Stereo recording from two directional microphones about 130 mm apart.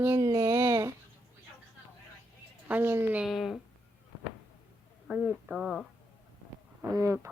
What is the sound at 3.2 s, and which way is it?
Speech, centre (ahead or behind).